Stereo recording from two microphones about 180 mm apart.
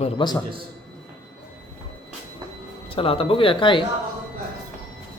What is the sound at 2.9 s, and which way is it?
Speech, 30° left (ahead or behind).